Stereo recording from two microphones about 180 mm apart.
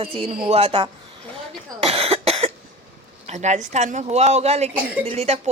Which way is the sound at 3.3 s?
40° right (ahead or behind).